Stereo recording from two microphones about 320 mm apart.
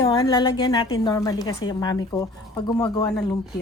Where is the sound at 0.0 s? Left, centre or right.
Centre.